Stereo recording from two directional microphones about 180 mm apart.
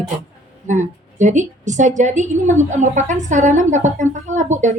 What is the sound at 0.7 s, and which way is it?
A woman's voice, 40° right (ahead or behind).